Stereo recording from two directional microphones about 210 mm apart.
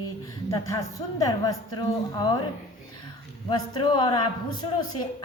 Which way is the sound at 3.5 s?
20° left (ahead or behind).